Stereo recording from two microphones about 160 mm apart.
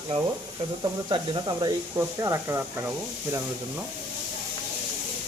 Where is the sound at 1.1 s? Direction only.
30° right (ahead or behind).